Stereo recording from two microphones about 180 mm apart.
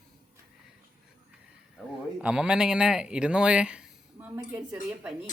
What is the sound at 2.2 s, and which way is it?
A woman's voice, 5° right (ahead or behind).